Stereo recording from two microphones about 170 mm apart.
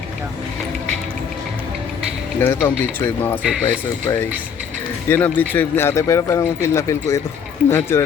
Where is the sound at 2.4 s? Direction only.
15° left (ahead or behind).